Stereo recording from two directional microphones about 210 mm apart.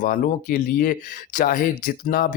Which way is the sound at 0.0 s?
40° left (ahead or behind).